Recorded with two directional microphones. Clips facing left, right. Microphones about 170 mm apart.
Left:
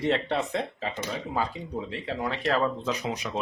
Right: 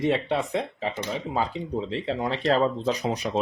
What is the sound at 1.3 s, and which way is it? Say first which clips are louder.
Speech: right 4 dB; 25° right (ahead or behind).